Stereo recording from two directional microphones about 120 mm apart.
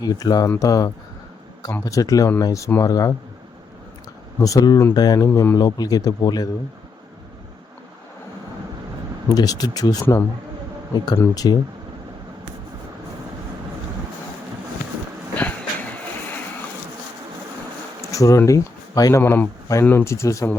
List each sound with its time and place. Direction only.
0.0 s speech: 30° left (ahead or behind)
4.4 s speech: 30° left (ahead or behind)
9.3 s speech: 30° left (ahead or behind)
15.4 s vehicle: 10° left (ahead or behind)
18.1 s speech: 25° left (ahead or behind)